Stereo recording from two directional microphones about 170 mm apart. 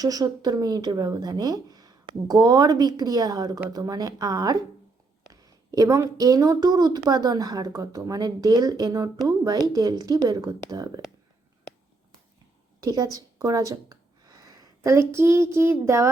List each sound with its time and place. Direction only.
0.0 s a woman's voice: 20° right (ahead or behind)
12.8 s speech: 20° right (ahead or behind)